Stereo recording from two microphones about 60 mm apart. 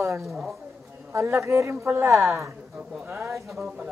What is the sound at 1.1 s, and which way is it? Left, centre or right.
Speech, right.